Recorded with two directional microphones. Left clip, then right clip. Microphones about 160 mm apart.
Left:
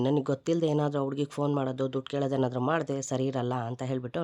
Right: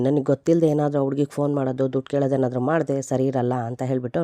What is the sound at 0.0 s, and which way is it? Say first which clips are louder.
Speech: right 7 dB; 35° right (ahead or behind).